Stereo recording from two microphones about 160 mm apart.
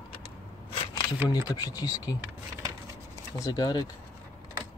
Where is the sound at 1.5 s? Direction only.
25° left (ahead or behind).